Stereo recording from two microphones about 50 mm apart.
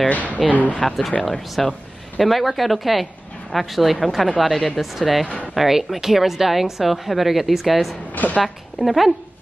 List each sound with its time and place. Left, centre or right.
0.4 s a woman's voice: centre
8.1 s a woman's voice: left
8.4 s a woman's voice: centre